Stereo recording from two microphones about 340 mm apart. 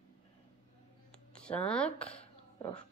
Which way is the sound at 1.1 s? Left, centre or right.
Centre.